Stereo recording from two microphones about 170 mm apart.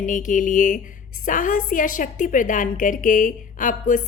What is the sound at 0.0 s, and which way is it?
A woman's voice, 50° left (ahead or behind).